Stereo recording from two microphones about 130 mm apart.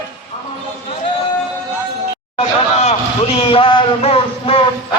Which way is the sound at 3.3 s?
45° left (ahead or behind).